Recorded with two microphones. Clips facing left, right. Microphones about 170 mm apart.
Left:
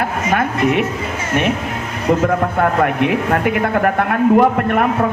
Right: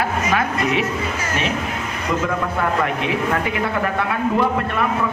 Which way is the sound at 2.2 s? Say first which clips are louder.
Left 6 dB; 50° left (ahead or behind).